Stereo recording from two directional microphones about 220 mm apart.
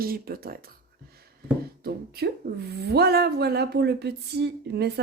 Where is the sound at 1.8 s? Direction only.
45° right (ahead or behind).